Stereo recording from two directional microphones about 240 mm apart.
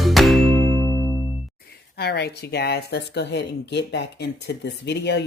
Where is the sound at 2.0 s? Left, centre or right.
Left.